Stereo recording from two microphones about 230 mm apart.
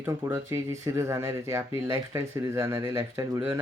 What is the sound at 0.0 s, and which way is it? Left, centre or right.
Speech, centre.